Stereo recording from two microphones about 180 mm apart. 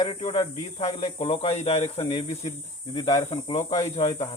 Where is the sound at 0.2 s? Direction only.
30° left (ahead or behind).